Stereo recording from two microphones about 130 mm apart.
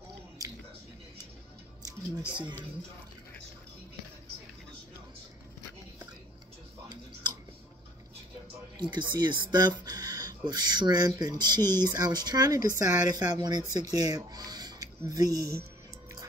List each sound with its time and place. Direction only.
1.8 s speech: 30° right (ahead or behind)
8.7 s speech: 35° right (ahead or behind)